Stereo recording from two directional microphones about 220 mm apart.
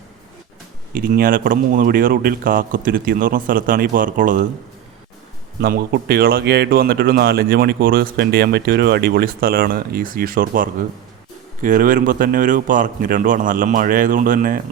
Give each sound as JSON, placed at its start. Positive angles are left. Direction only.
{"t": 0.9, "sound": "speech", "side_deg": -40}
{"t": 5.5, "sound": "speech", "side_deg": -45}